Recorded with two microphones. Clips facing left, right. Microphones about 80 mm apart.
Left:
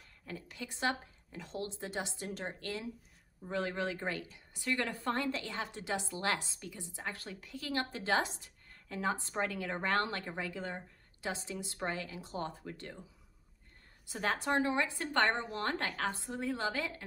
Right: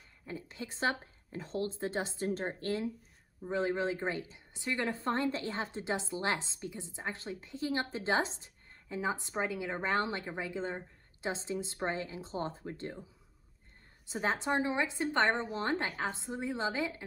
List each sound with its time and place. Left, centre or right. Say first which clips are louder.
0.3 s a woman's voice: right 2 dB; right
14.0 s a woman's voice: right 1 dB; right